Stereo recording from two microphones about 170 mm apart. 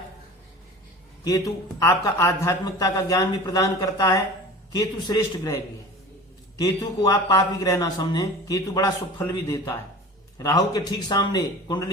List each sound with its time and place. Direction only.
1.8 s speech: 15° left (ahead or behind)